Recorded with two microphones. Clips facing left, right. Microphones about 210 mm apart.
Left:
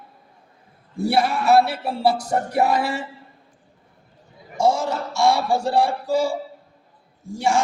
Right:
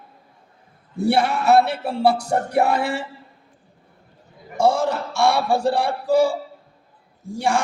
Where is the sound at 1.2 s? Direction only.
60° right (ahead or behind).